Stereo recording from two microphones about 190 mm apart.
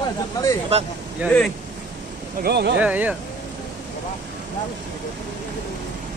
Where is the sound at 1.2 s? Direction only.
5° left (ahead or behind).